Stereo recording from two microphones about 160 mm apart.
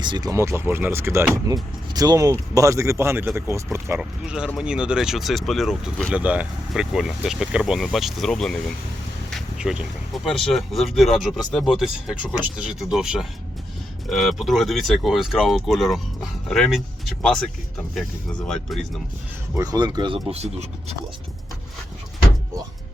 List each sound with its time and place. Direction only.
0.0 s speech: 25° right (ahead or behind)
4.3 s speech: 5° right (ahead or behind)
9.3 s a sound: 5° right (ahead or behind)
10.2 s speech: centre (ahead or behind)
18.4 s speech: centre (ahead or behind)
19.5 s speech: 25° right (ahead or behind)
20.3 s speech: 40° right (ahead or behind)